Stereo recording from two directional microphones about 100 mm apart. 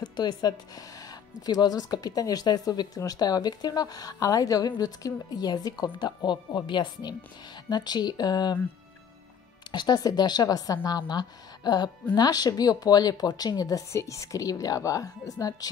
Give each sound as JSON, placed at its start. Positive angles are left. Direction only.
{"t": 0.0, "sound": "a woman's voice", "side_deg": 45}
{"t": 9.7, "sound": "a woman's voice", "side_deg": 45}